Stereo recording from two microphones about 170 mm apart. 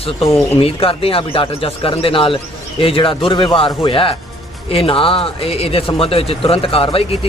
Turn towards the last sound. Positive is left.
turn(degrees=35)  # may be behind; listen again after turning